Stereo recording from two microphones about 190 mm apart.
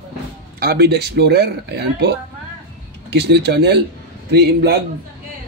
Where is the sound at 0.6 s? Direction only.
55° right (ahead or behind).